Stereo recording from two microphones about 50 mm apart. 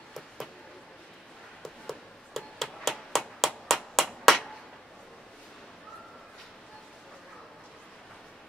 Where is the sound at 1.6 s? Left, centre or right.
Centre.